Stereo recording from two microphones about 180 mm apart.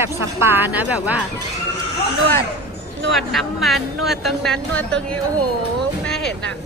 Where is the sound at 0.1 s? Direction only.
15° right (ahead or behind).